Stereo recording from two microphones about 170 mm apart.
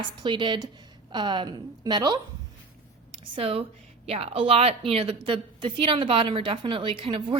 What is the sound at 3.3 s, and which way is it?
A woman's voice, 35° right (ahead or behind).